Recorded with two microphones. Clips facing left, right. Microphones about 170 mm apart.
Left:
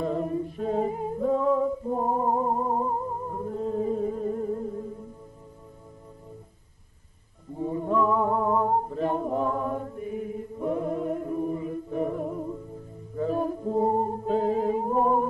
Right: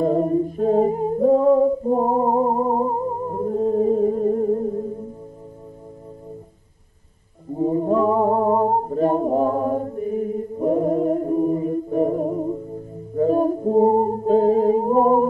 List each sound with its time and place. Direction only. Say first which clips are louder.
0.0 s music: right 9 dB; 40° right (ahead or behind)
7.5 s a sound: right 7 dB; 40° right (ahead or behind)
13.1 s music: right 9 dB; 40° right (ahead or behind)